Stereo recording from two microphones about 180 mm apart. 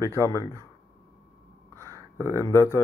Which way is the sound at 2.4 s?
15° left (ahead or behind).